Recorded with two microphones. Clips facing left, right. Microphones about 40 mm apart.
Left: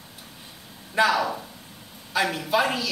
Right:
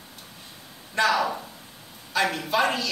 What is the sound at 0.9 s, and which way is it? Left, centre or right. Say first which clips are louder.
A woman's voice: left 1 dB; centre.